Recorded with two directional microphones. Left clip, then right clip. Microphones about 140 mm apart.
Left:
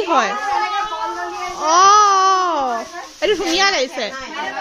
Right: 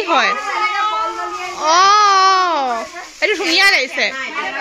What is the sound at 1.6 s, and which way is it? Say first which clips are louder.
Babbling: even; 20° left (ahead or behind).